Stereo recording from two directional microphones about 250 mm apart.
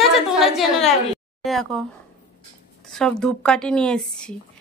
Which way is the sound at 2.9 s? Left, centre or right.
Centre.